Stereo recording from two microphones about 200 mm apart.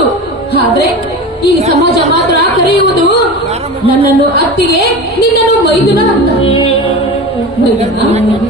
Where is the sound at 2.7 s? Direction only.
55° left (ahead or behind).